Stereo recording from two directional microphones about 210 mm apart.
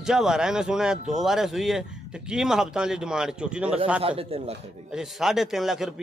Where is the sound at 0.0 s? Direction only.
Centre (ahead or behind).